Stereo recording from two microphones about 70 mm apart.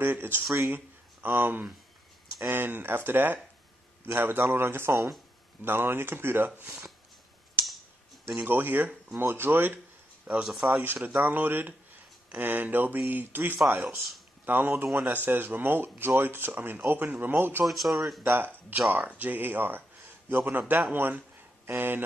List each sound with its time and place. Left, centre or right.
0.0 s speech: right
8.4 s speech: right
10.3 s speech: centre
11.2 s speech: right
13.6 s speech: centre
14.4 s speech: right
17.6 s speech: centre
18.3 s speech: right